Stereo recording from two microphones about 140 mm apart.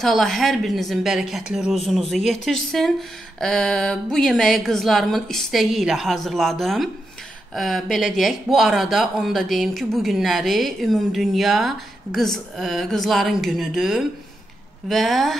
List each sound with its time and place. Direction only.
0.0 s speech: centre (ahead or behind)